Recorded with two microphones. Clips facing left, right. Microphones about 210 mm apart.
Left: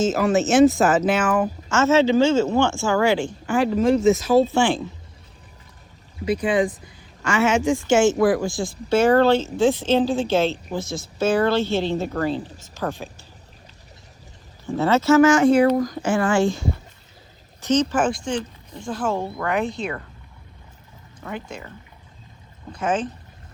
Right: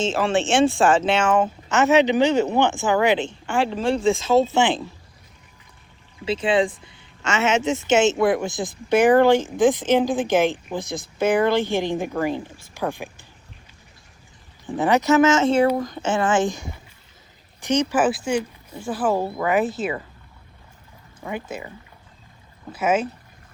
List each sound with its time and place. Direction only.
0.0 s speech: 30° right (ahead or behind)
3.8 s speech: 30° right (ahead or behind)
6.2 s speech: 25° right (ahead or behind)
14.8 s speech: 15° right (ahead or behind)
21.2 s speech: 5° right (ahead or behind)
22.7 s speech: 5° right (ahead or behind)